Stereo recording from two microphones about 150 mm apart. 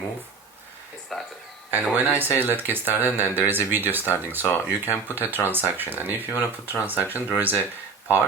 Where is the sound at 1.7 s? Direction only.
15° right (ahead or behind).